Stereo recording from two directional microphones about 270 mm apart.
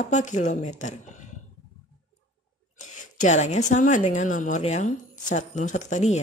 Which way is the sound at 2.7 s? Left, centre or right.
Left.